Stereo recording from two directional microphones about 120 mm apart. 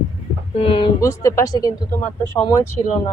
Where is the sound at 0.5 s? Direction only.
50° left (ahead or behind).